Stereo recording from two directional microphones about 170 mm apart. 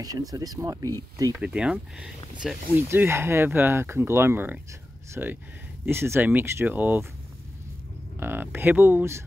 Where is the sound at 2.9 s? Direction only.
15° right (ahead or behind).